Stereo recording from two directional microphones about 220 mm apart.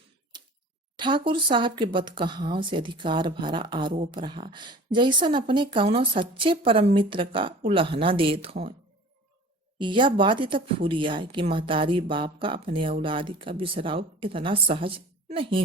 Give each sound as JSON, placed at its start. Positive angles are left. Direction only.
{"t": 0.9, "sound": "speech", "side_deg": -20}
{"t": 9.7, "sound": "speech", "side_deg": -20}